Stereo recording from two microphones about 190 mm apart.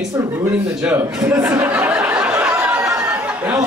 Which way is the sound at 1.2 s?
10° right (ahead or behind).